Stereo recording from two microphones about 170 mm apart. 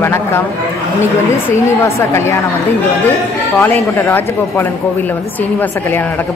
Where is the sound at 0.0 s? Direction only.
15° left (ahead or behind).